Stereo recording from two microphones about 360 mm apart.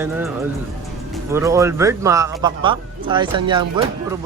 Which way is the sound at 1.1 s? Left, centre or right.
Centre.